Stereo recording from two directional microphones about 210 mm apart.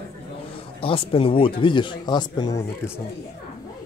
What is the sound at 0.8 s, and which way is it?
Speech, 25° left (ahead or behind).